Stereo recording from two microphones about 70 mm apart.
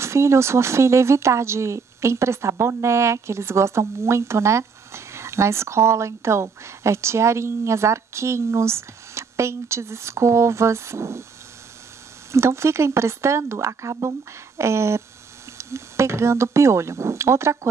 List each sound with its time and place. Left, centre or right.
0.0 s speech: right
12.3 s speech: right